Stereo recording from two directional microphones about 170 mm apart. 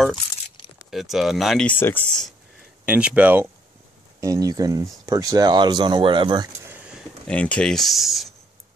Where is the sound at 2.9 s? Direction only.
5° right (ahead or behind).